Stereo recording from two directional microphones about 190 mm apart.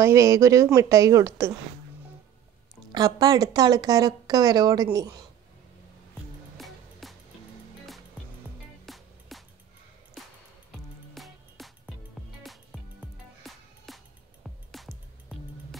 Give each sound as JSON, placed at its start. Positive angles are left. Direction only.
{"t": 0.0, "sound": "speech", "side_deg": -15}
{"t": 2.9, "sound": "speech", "side_deg": -20}
{"t": 6.6, "sound": "music", "side_deg": 0}
{"t": 8.8, "sound": "music", "side_deg": 0}
{"t": 11.1, "sound": "music", "side_deg": 0}
{"t": 13.0, "sound": "music", "side_deg": 0}